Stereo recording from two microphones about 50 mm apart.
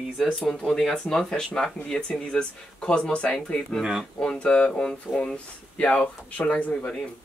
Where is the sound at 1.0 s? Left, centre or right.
Centre; by 6.9 s left.